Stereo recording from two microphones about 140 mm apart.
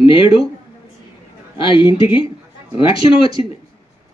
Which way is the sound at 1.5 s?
35° left (ahead or behind).